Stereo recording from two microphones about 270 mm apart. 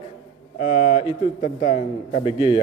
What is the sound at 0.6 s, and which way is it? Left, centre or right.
Speech, left.